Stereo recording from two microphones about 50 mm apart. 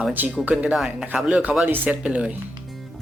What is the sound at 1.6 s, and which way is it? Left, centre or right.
Speech, right.